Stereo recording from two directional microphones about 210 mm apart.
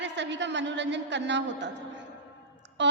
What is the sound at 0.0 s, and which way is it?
A woman's voice, 60° right (ahead or behind).